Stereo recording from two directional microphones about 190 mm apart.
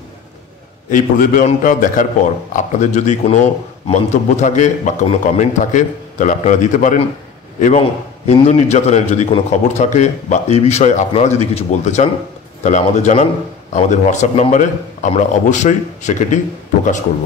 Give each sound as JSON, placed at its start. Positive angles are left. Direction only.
{"t": 0.8, "sound": "a man's voice", "side_deg": 45}